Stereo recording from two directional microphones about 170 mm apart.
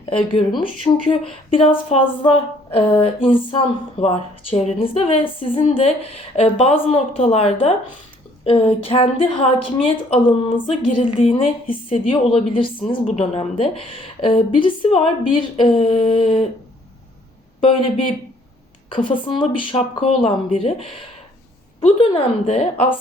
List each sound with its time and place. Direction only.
0.0 s a woman's voice: 30° left (ahead or behind)
1.5 s a woman's voice: 35° left (ahead or behind)
17.6 s speech: 30° left (ahead or behind)
18.9 s a woman's voice: 30° left (ahead or behind)
21.8 s a woman's voice: 35° left (ahead or behind)